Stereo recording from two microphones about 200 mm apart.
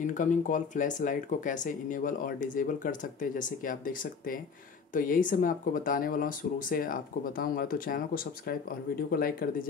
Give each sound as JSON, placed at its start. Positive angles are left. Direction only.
{"t": 0.0, "sound": "speech", "side_deg": 40}